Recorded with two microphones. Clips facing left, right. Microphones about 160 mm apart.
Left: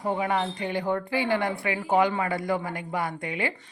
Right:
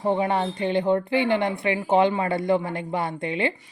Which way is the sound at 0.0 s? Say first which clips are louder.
Right 4 dB; 25° right (ahead or behind).